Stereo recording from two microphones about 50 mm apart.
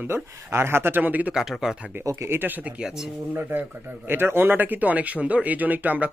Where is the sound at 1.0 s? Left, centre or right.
Right.